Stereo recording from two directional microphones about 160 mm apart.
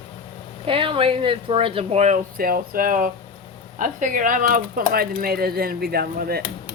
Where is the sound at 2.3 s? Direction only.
65° right (ahead or behind).